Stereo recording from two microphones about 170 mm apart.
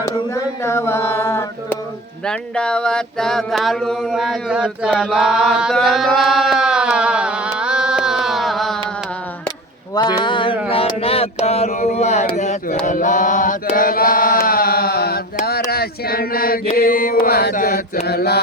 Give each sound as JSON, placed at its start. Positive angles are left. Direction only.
{"t": 0.6, "sound": "mantra", "side_deg": 15}
{"t": 2.2, "sound": "a sound", "side_deg": 5}
{"t": 7.6, "sound": "carnatic music", "side_deg": -5}
{"t": 9.9, "sound": "a sound", "side_deg": 25}
{"t": 12.8, "sound": "chant", "side_deg": 45}
{"t": 15.7, "sound": "male singing", "side_deg": 65}
{"t": 16.7, "sound": "mantra", "side_deg": 55}
{"t": 18.0, "sound": "mantra", "side_deg": 70}